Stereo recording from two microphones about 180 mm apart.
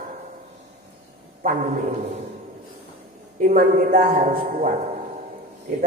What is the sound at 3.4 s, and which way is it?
A man's voice, 45° right (ahead or behind).